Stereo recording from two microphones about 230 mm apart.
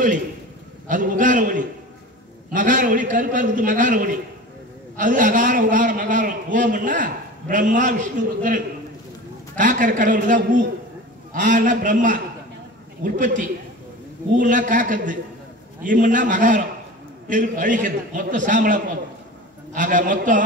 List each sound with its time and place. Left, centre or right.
0.8 s a man's voice: right